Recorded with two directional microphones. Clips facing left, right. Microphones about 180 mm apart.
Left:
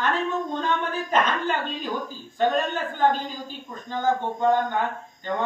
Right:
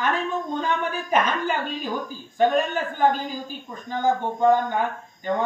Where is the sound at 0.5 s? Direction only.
10° right (ahead or behind).